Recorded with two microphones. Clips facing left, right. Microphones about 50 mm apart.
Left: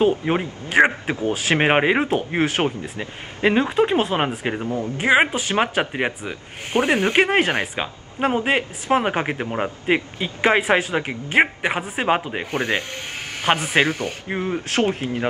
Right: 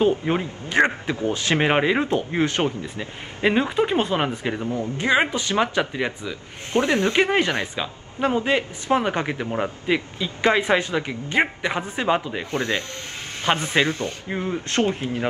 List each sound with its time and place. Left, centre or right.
0.0 s speech: centre
1.0 s speech: left
3.4 s speech: centre; by 4.6 s left
4.6 s speech: left
4.9 s speech: left
10.5 s speech: left